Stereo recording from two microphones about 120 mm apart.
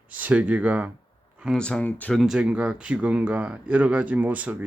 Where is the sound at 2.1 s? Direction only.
Centre (ahead or behind).